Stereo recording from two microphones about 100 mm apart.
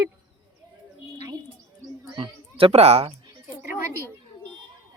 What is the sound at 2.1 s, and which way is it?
Speech, 65° right (ahead or behind).